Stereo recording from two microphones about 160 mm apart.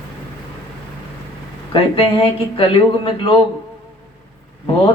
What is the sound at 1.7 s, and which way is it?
Speech, 35° left (ahead or behind).